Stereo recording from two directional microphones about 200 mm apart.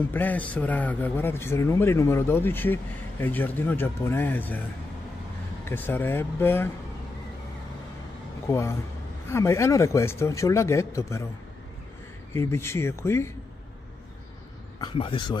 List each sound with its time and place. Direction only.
0.0 s a man's voice: 10° left (ahead or behind)
5.7 s a man's voice: 10° left (ahead or behind)
8.5 s a man's voice: 15° left (ahead or behind)
12.4 s a man's voice: 10° left (ahead or behind)
14.8 s speech: 25° left (ahead or behind)